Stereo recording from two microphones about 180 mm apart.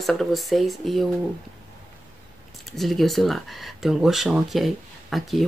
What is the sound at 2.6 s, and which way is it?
Speech, centre (ahead or behind).